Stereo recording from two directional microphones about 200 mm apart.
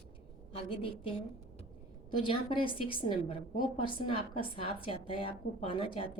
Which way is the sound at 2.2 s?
25° left (ahead or behind).